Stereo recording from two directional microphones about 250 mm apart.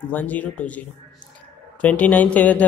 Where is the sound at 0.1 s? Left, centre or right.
Centre.